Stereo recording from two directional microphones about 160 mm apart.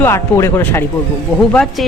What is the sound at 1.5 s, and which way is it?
Speech, centre (ahead or behind).